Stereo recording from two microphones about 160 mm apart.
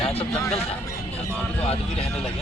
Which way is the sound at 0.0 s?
40° left (ahead or behind).